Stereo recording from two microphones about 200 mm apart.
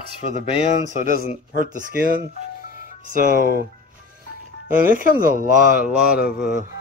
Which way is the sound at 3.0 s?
40° right (ahead or behind).